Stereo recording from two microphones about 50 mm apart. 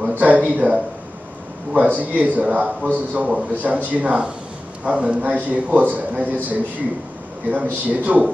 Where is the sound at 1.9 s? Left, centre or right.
Right.